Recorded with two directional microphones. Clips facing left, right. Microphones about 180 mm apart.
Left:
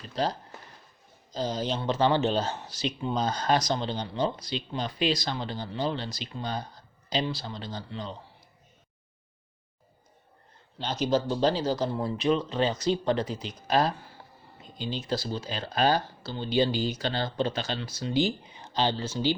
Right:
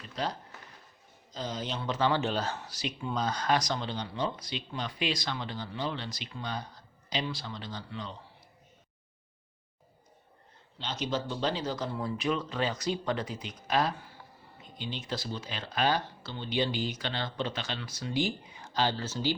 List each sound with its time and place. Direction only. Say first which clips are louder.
0.1 s speech: left 5 dB; 35° left (ahead or behind)
10.8 s speech: left 7 dB; 40° left (ahead or behind); by 19.3 s 15° left (ahead or behind)